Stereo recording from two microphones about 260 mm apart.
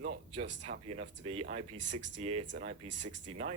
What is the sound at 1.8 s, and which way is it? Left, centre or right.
Speech, right.